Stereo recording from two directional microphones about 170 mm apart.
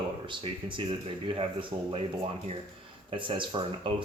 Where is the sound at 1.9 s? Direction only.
35° right (ahead or behind).